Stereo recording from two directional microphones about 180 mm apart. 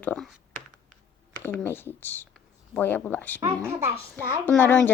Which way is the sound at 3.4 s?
15° right (ahead or behind).